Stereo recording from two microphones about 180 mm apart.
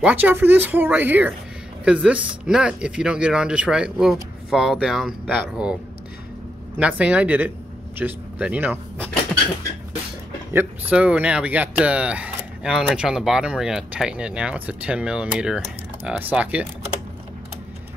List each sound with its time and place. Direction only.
0.0 s speech: 10° right (ahead or behind)
6.8 s speech: 5° right (ahead or behind)
10.5 s speech: 10° right (ahead or behind)